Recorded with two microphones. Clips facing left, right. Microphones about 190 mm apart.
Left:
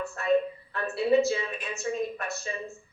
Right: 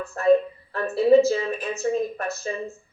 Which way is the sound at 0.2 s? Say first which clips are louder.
Right 7 dB; 35° right (ahead or behind).